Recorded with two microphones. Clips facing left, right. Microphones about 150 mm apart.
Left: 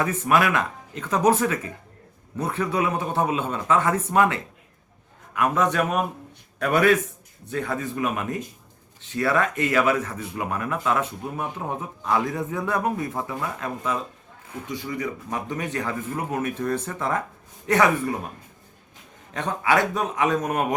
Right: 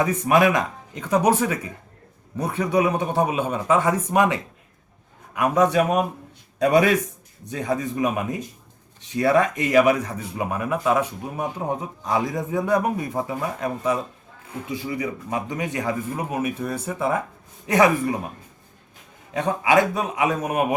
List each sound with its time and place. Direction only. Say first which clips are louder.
0.0 s speech: right 3 dB; 15° right (ahead or behind)
19.3 s speech: right 3 dB; 10° right (ahead or behind)